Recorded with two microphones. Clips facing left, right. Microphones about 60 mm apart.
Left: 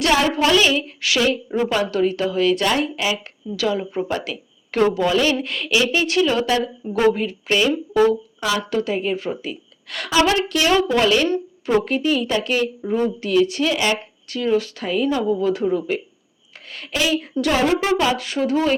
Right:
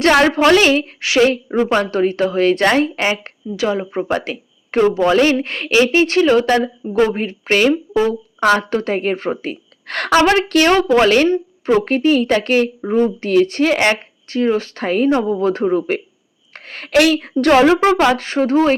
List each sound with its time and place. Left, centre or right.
0.0 s a woman's voice: right
1.0 s a woman's voice: right
3.5 s a woman's voice: right
14.3 s a woman's voice: right
16.9 s a woman's voice: right
17.4 s a woman's voice: right